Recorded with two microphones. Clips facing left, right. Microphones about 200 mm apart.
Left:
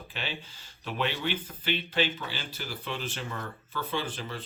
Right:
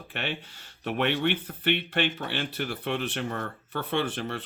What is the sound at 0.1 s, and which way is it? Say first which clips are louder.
Speech: right 5 dB; 60° right (ahead or behind).